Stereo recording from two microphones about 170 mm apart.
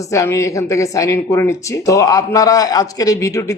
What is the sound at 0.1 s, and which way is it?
A woman's voice, 20° left (ahead or behind).